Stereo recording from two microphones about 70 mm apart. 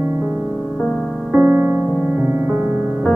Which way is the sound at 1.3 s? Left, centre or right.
Right.